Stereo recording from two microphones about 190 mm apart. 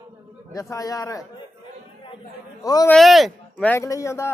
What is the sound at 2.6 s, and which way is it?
Speech, 20° left (ahead or behind).